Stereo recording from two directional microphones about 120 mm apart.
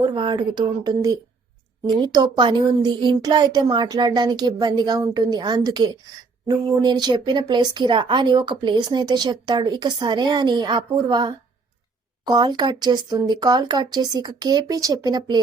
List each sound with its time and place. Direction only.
0.0 s speech: 40° right (ahead or behind)